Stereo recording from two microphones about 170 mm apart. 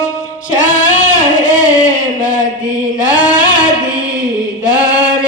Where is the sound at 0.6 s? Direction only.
50° left (ahead or behind).